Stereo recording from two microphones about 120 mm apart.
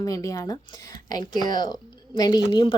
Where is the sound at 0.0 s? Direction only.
30° left (ahead or behind).